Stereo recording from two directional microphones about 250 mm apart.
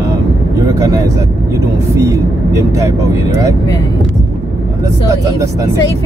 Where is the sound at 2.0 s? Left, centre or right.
Centre.